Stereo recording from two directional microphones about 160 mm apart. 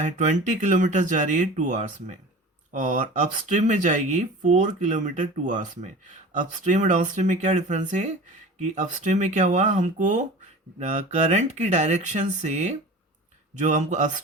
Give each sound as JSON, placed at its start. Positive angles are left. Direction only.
{"t": 0.0, "sound": "speech", "side_deg": -50}